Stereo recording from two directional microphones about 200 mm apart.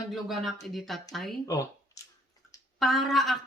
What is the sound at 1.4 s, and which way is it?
Speech, 15° left (ahead or behind).